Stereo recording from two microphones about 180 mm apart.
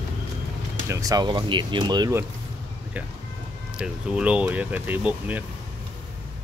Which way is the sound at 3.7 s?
5° right (ahead or behind).